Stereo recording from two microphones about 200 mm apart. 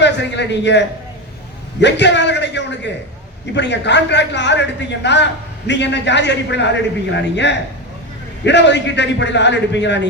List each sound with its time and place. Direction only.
0.0 s a man's voice: 60° left (ahead or behind)